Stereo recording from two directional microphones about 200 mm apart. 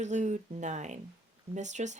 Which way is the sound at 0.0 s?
35° right (ahead or behind).